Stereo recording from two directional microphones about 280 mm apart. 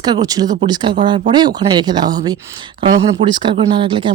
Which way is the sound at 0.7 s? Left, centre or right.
Centre.